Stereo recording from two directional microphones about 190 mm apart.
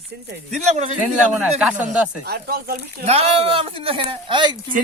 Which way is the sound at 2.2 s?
55° right (ahead or behind).